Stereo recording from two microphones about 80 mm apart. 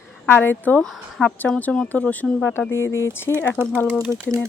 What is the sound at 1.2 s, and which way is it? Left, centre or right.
Speech, centre.